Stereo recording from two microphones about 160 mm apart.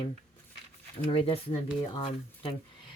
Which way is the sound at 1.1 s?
35° left (ahead or behind).